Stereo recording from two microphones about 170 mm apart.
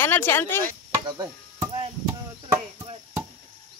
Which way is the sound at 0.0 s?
10° left (ahead or behind).